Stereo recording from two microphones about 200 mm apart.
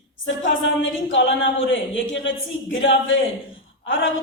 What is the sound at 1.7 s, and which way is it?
A man's voice, 70° left (ahead or behind).